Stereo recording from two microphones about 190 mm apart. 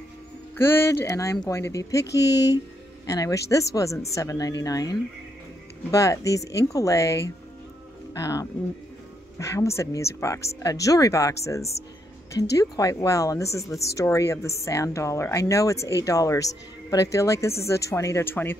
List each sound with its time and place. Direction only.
0.6 s speech: 10° left (ahead or behind)
2.0 s speech: 65° left (ahead or behind)
3.1 s a woman's voice: 15° left (ahead or behind)
12.4 s speech: 20° left (ahead or behind)